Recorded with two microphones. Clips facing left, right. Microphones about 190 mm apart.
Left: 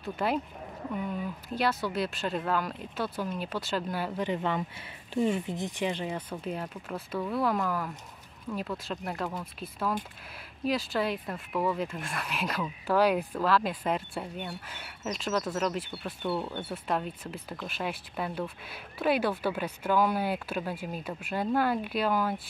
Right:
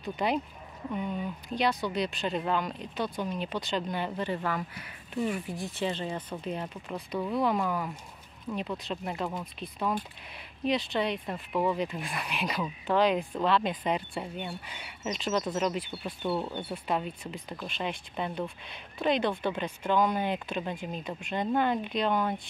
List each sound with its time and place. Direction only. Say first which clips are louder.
0.0 s speech: even; centre (ahead or behind)
1.5 s speech: right 1 dB; 5° left (ahead or behind)
4.3 s speech: left 2 dB; 20° left (ahead or behind); by 22.4 s 5° left (ahead or behind)